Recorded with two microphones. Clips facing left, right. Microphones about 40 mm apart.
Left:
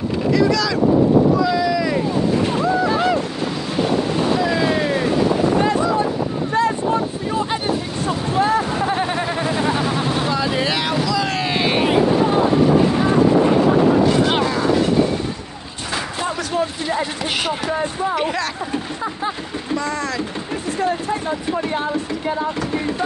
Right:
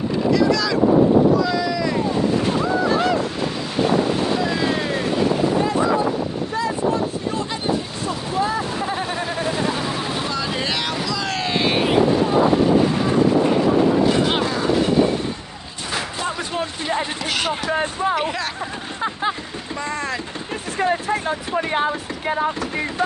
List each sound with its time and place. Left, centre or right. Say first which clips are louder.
0.5 s speech: left 1 dB; centre
1.4 s vehicle: left 3 dB; centre
2.6 s a sound: left 1 dB; centre
8.9 s vehicle: left 3 dB; left; by 11.9 s centre
14.3 s mechanisms: left 2 dB; centre
18.1 s speech: left 2 dB; centre
19.8 s speech: right 1 dB; right
20.8 s a sound: right 2 dB; right
21.6 s speech: right 5 dB; right